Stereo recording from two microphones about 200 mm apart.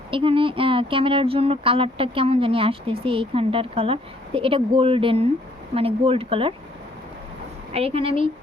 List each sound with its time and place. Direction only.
0.1 s speech: 25° right (ahead or behind)
7.7 s speech: 30° right (ahead or behind)